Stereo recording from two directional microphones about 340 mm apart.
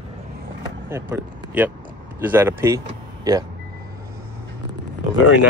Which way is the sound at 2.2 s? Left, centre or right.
Centre.